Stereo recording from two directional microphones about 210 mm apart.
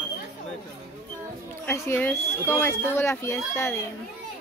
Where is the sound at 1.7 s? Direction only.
10° left (ahead or behind).